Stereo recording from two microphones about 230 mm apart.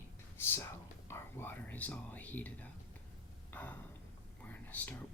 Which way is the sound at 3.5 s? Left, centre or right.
Centre.